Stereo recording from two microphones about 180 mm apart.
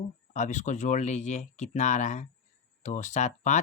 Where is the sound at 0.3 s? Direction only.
40° left (ahead or behind).